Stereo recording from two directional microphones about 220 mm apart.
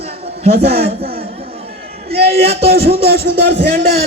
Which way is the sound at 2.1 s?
25° right (ahead or behind).